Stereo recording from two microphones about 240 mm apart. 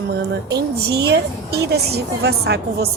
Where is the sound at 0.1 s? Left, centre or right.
Right.